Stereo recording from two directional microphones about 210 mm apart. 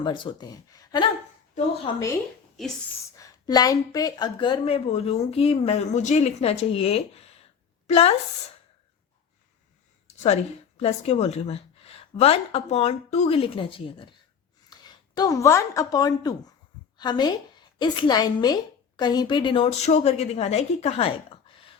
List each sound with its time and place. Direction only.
0.0 s a woman's voice: 25° left (ahead or behind)
3.2 s a woman's voice: 20° left (ahead or behind)
10.2 s a woman's voice: 30° left (ahead or behind)